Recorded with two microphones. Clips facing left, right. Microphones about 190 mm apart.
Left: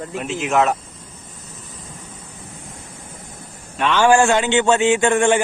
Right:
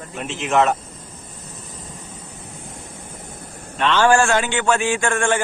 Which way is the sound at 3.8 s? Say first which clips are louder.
Left 1 dB; 10° left (ahead or behind).